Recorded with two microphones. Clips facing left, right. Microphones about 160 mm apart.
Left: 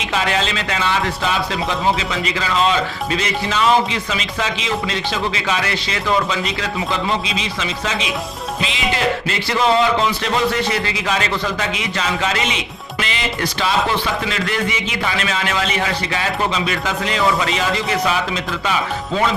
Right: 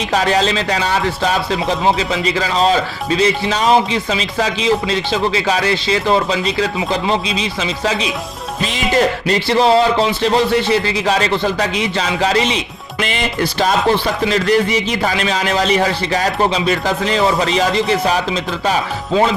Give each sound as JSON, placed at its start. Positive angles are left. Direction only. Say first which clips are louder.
{"t": 0.1, "sound": "speech", "louder": "right 5 dB", "side_deg": -40}